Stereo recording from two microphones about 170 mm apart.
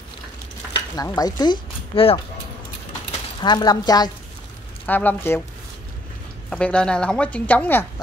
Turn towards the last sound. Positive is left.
turn(degrees=10)  # may be behind; listen again after turning